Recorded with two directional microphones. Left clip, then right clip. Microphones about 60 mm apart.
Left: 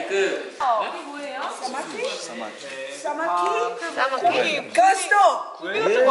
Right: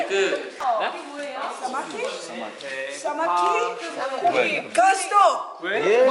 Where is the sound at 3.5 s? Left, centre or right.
Centre.